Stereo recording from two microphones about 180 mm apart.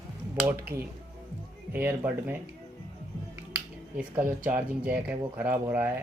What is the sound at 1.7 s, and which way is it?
Speech, 10° right (ahead or behind).